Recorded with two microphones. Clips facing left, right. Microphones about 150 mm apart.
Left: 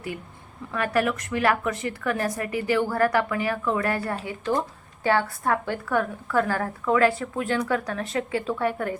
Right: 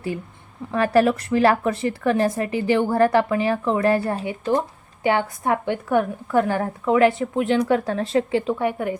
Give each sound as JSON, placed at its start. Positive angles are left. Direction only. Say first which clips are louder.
{"t": 0.7, "sound": "speech", "louder": "right 7 dB", "side_deg": -30}